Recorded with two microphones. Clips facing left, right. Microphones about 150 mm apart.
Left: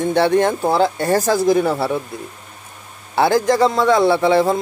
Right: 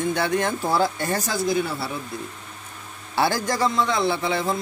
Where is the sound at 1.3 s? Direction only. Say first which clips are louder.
Left 8 dB; 40° left (ahead or behind).